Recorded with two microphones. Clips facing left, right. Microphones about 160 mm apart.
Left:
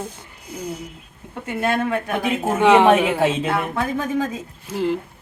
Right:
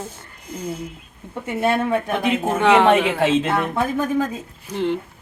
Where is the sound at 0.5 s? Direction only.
10° left (ahead or behind).